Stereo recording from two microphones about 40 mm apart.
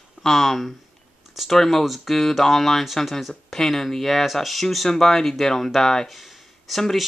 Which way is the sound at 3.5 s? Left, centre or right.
Centre.